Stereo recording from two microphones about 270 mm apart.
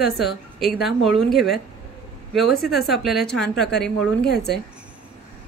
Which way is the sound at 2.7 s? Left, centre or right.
Centre.